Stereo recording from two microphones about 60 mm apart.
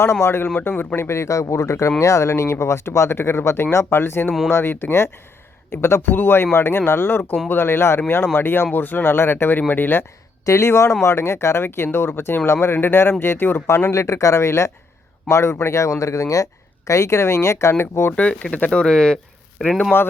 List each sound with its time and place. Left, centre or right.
0.0 s speech: left
0.5 s speech: left
0.9 s speech: left
10.4 s speech: left
13.9 s speech: left
18.5 s speech: centre